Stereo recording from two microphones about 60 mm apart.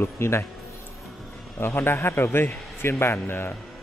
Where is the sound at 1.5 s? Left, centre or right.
Left.